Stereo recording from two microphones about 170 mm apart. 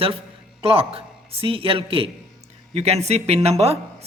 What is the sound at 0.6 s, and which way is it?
A man's voice, 35° right (ahead or behind).